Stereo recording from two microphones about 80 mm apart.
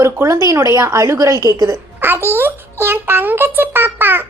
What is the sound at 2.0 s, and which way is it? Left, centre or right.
Babbling, right.